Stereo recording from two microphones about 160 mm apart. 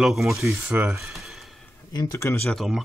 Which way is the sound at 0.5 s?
15° right (ahead or behind).